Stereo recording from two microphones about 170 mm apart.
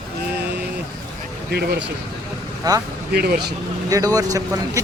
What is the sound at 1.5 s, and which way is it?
Speech, 75° right (ahead or behind).